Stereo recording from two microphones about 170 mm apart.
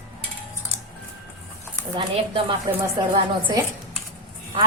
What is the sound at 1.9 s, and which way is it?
Speech, 30° right (ahead or behind).